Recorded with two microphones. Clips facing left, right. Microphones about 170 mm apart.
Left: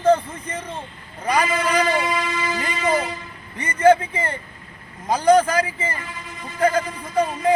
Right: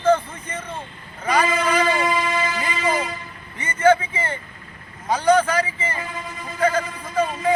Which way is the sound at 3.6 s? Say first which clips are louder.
Left 2 dB; 35° left (ahead or behind).